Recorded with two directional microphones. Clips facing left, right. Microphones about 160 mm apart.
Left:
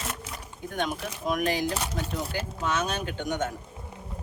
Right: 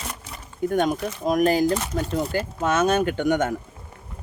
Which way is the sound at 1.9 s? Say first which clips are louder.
Right 7 dB; 50° right (ahead or behind).